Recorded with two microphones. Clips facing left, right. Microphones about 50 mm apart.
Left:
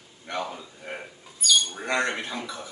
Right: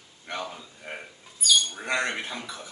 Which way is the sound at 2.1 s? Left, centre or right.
Centre.